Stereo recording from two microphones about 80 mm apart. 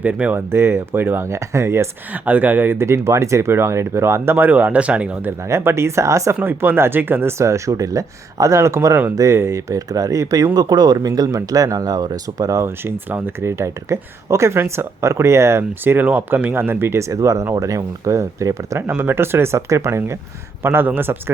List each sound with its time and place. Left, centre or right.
0.0 s speech: centre
0.3 s speech: right
2.1 s speech: right
5.5 s speech: right
6.4 s speech: right
18.8 s speech: right